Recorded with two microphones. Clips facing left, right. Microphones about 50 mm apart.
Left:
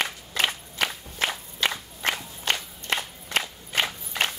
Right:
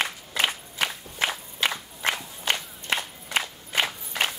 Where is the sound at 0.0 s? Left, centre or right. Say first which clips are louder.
Even; centre.